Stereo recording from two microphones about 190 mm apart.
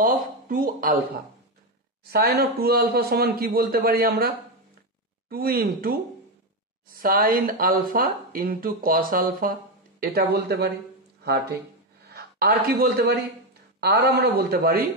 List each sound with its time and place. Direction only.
0.0 s speech: 45° right (ahead or behind)
2.0 s speech: 55° right (ahead or behind)
5.3 s speech: 55° right (ahead or behind)
7.0 s a man's voice: 50° right (ahead or behind)
14.2 s speech: 55° right (ahead or behind)